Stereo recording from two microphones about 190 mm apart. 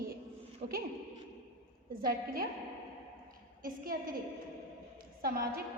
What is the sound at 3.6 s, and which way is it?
Speech, 50° right (ahead or behind).